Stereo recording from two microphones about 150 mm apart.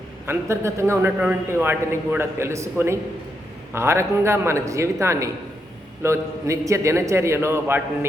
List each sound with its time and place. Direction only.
0.3 s a man's voice: 20° right (ahead or behind)